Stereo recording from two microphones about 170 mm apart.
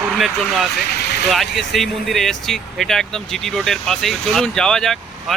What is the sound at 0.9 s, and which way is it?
Vehicle, 80° left.